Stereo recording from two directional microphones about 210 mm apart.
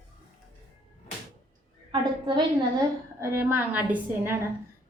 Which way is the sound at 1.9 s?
20° right (ahead or behind).